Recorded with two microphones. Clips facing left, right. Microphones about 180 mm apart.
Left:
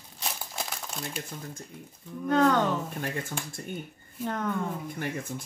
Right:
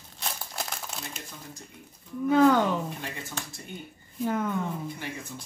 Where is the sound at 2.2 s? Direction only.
5° right (ahead or behind).